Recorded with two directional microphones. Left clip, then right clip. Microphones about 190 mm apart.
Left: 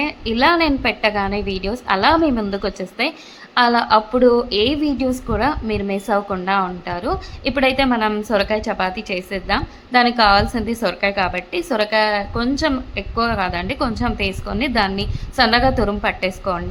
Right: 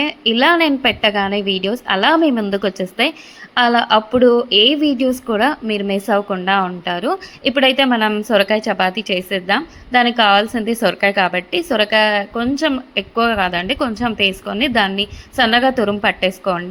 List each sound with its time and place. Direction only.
0.0 s a woman's voice: 20° right (ahead or behind)